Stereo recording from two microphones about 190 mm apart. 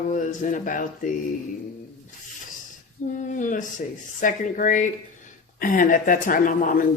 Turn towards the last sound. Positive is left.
turn(degrees=45)  # may be behind; listen again after turning